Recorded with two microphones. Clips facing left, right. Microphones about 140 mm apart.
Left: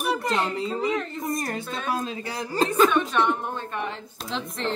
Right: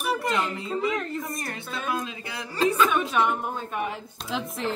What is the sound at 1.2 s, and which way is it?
A man's voice, 35° left (ahead or behind).